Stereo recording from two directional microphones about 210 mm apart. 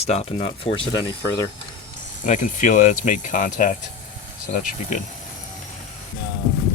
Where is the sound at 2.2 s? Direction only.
35° left (ahead or behind).